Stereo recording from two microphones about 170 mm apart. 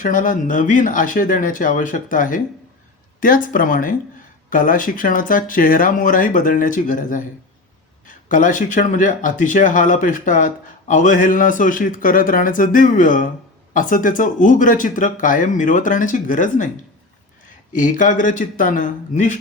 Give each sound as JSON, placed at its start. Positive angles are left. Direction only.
{"t": 0.0, "sound": "speech", "side_deg": 50}
{"t": 17.7, "sound": "speech", "side_deg": 50}